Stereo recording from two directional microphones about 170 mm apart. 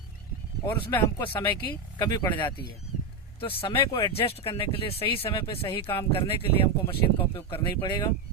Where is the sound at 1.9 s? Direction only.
25° left (ahead or behind).